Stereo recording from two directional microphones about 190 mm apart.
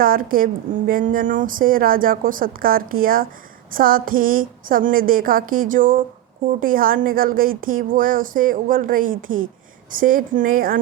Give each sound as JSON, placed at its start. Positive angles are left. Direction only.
{"t": 0.0, "sound": "speech", "side_deg": -50}